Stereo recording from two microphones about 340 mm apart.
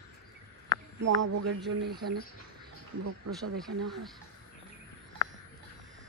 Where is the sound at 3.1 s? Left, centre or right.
Right.